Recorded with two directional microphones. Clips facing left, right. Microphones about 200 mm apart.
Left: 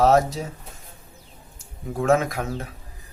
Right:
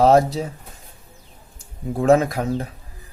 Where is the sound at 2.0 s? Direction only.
35° right (ahead or behind).